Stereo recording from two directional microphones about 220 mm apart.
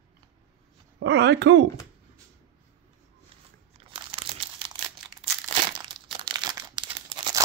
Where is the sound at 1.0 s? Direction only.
50° right (ahead or behind).